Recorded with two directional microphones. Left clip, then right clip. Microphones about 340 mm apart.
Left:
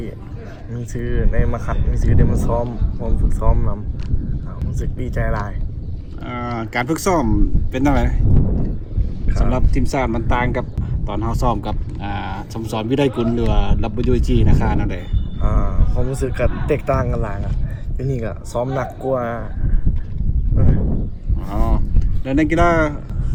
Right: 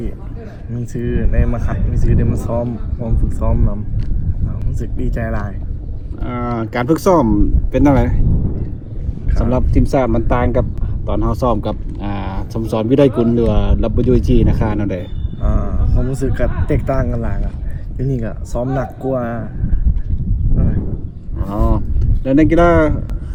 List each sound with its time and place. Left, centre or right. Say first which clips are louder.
0.7 s speech: right 4 dB; centre
5.0 s speech: even; centre
6.2 s speech: right 4 dB; centre
9.4 s speech: right 5 dB; centre
15.4 s speech: right 1 dB; centre
21.4 s speech: right 4 dB; centre